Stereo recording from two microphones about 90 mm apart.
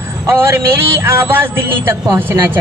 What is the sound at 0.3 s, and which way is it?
Music, 30° right (ahead or behind).